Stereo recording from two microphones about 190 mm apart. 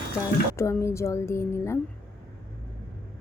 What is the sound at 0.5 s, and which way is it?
Speech, 15° left (ahead or behind).